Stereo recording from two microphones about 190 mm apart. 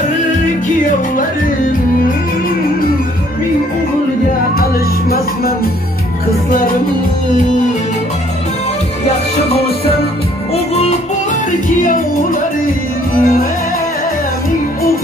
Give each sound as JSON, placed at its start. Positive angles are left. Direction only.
{"t": 0.7, "sound": "music", "side_deg": 45}
{"t": 11.8, "sound": "music", "side_deg": 45}